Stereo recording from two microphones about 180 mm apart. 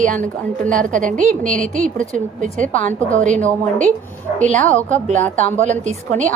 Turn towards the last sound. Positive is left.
turn(degrees=-40)  # may be behind; listen again after turning